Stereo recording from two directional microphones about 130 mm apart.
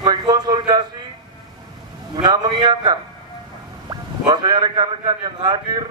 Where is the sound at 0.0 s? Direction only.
30° right (ahead or behind).